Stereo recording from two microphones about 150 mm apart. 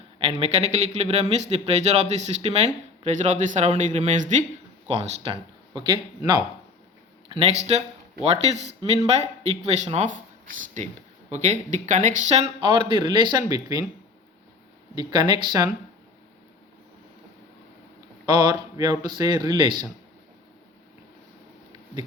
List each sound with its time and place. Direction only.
0.2 s speech: 40° right (ahead or behind)
4.9 s speech: 40° right (ahead or behind)
7.3 s speech: 40° right (ahead or behind); by 13.8 s 25° right (ahead or behind)
14.9 s speech: 30° right (ahead or behind)
18.3 s speech: 30° right (ahead or behind)